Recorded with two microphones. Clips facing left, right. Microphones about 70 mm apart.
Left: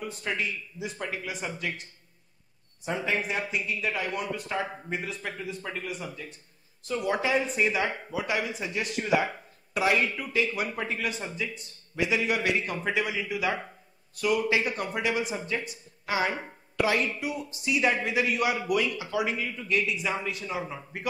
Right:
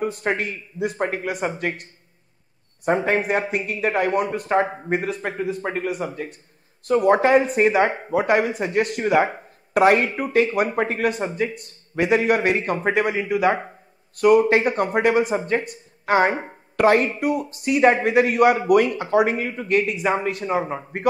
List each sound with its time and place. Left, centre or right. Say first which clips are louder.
0.0 s speech: right 8 dB; right
9.8 s a man's voice: right 9 dB; right